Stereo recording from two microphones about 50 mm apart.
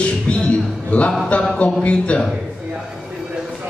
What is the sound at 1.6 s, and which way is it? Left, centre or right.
Speech, left.